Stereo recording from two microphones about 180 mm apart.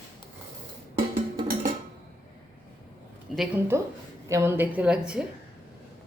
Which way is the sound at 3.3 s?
Centre (ahead or behind).